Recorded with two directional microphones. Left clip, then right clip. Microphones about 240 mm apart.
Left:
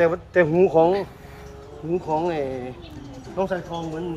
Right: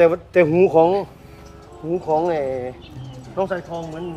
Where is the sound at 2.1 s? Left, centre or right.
Right.